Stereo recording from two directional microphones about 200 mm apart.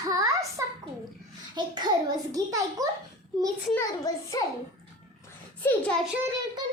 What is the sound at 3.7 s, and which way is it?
Speech, 15° left (ahead or behind).